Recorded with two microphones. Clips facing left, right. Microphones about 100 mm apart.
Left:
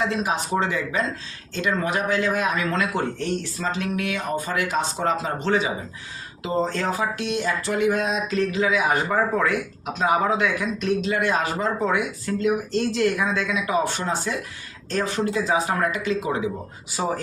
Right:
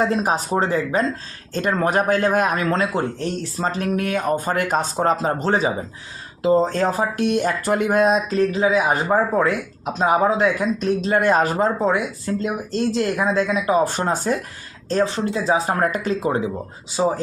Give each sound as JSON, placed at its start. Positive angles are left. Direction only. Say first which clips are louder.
{"t": 0.0, "sound": "speech", "louder": "right 4 dB", "side_deg": -40}
{"t": 11.8, "sound": "speech", "louder": "right 3 dB", "side_deg": -30}
{"t": 14.8, "sound": "speech", "louder": "right 4 dB", "side_deg": -30}